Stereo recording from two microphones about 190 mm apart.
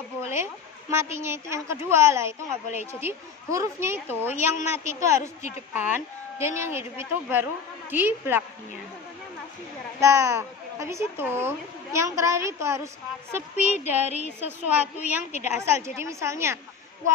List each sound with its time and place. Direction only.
0.2 s a woman's voice: 15° right (ahead or behind)
9.9 s a woman's voice: 15° right (ahead or behind)
14.0 s a woman's voice: 35° left (ahead or behind)
14.4 s a woman's voice: 10° right (ahead or behind)
15.3 s a woman's voice: 35° left (ahead or behind)
15.6 s a woman's voice: 15° right (ahead or behind)